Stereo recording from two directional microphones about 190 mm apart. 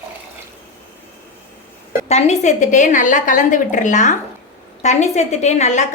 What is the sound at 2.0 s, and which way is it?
A woman's voice, 35° left (ahead or behind).